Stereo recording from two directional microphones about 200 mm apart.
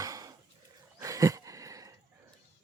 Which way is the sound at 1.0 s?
15° right (ahead or behind).